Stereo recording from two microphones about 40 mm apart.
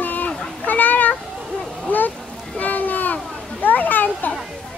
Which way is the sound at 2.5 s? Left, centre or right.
Left.